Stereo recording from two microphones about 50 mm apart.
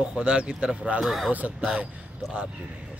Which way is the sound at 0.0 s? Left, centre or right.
Centre.